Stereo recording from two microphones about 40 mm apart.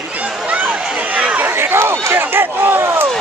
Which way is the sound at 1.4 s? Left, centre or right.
Right.